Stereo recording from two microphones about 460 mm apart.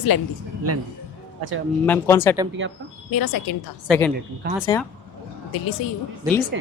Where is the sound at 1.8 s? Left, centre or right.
Centre.